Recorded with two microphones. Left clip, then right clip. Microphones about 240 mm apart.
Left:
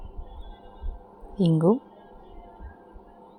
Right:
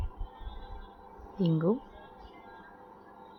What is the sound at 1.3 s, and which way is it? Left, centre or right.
Speech, centre.